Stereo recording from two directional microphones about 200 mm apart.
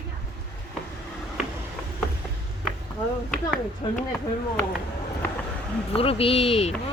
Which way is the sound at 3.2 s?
5° left (ahead or behind).